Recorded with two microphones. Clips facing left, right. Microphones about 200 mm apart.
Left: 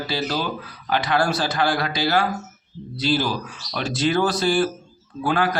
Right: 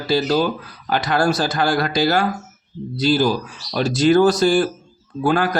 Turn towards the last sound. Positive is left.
turn(degrees=-45)  # may be behind; listen again after turning